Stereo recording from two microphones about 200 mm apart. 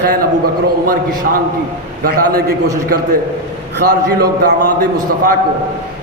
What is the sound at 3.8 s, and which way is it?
A man's voice, 55° right (ahead or behind).